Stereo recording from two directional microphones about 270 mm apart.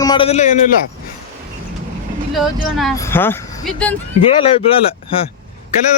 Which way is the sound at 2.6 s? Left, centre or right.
Centre.